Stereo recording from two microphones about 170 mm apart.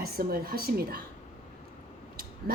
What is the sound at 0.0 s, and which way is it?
A woman's voice, 60° right (ahead or behind).